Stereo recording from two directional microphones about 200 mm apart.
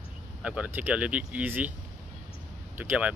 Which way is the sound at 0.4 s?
5° right (ahead or behind).